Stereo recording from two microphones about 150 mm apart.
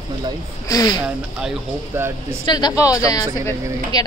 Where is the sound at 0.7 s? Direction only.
25° left (ahead or behind).